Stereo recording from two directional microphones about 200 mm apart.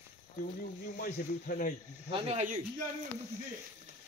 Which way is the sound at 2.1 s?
30° right (ahead or behind).